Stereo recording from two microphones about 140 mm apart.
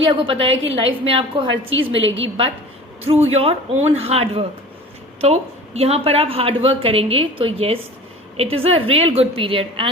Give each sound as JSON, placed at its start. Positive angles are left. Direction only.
{"t": 0.0, "sound": "a woman's voice", "side_deg": -40}
{"t": 3.0, "sound": "a woman's voice", "side_deg": -45}